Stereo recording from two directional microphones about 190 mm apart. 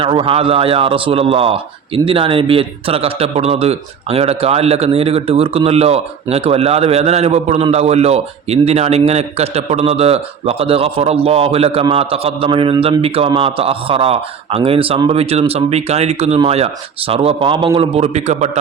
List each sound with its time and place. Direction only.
0.0 s a man's voice: 30° right (ahead or behind)